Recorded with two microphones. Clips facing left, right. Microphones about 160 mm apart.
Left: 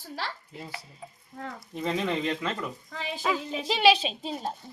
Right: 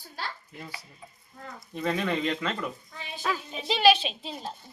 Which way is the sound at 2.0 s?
10° left (ahead or behind).